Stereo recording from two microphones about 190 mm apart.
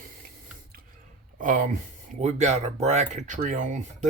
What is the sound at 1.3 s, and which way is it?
Speech, 45° right (ahead or behind).